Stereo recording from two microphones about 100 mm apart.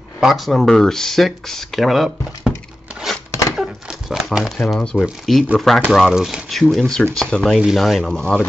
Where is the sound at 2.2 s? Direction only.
40° left (ahead or behind).